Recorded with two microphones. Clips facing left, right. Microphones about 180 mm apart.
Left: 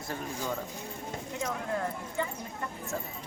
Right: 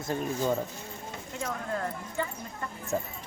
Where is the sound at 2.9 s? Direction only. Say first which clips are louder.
Right 7 dB; 20° right (ahead or behind).